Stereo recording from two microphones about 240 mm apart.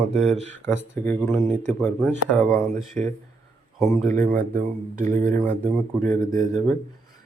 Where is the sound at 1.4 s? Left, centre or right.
Right.